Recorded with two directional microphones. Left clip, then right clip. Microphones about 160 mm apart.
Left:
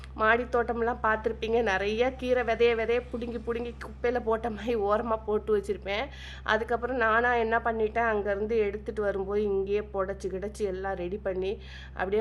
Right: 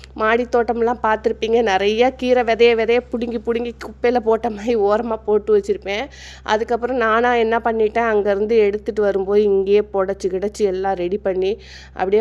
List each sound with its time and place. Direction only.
0.3 s a woman's voice: 40° right (ahead or behind)